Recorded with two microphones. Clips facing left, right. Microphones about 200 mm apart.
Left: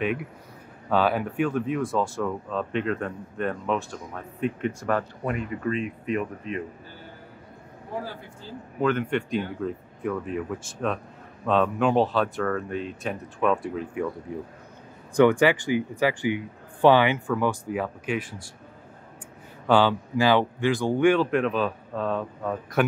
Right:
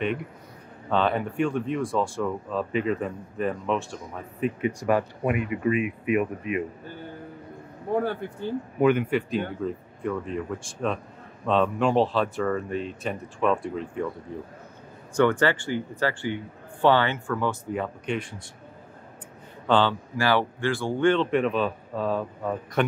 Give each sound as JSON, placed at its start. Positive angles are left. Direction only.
{"t": 0.0, "sound": "speech", "side_deg": 5}
{"t": 7.9, "sound": "speech", "side_deg": -60}
{"t": 8.7, "sound": "speech", "side_deg": -10}
{"t": 14.3, "sound": "speech", "side_deg": 15}
{"t": 19.7, "sound": "speech", "side_deg": 15}